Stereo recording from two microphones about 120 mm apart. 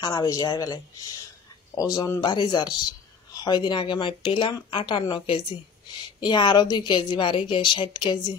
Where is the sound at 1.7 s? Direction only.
50° left (ahead or behind).